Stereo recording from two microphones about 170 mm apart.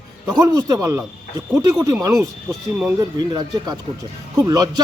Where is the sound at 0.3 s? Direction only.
20° right (ahead or behind).